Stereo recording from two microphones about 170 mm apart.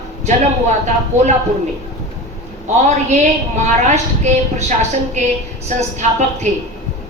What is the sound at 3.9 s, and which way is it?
Speech, 40° right (ahead or behind).